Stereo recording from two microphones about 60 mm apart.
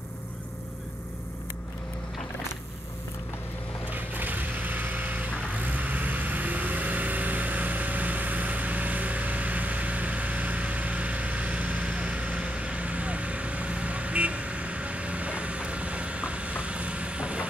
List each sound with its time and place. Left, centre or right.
3.9 s vehicle: right